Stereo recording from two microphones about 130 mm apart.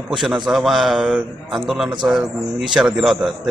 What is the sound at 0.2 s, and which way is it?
A man's voice, 5° right (ahead or behind).